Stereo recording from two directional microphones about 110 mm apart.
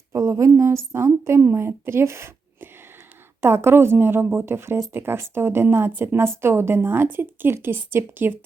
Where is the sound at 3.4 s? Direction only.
20° right (ahead or behind).